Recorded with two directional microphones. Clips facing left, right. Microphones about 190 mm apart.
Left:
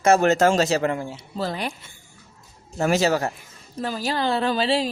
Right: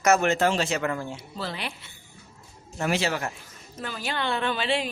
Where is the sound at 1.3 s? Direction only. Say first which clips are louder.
Left 8 dB; 40° left (ahead or behind).